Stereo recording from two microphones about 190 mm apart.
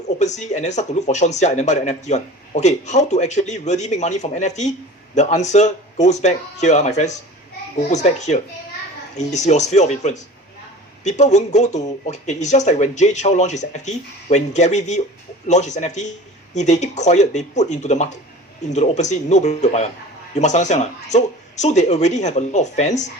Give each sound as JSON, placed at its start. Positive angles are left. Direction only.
{"t": 0.2, "sound": "speech", "side_deg": 35}